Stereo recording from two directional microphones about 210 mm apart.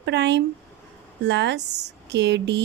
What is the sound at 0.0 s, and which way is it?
A woman's voice, 55° right (ahead or behind).